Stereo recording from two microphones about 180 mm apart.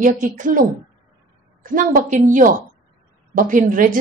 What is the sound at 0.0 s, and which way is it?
A woman's voice, 45° right (ahead or behind).